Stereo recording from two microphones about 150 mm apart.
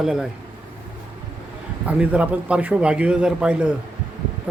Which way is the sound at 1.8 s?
10° right (ahead or behind).